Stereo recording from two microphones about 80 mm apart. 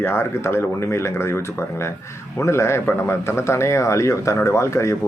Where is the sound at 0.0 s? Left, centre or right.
Left.